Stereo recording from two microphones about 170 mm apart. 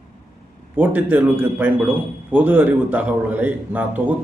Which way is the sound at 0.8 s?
10° right (ahead or behind).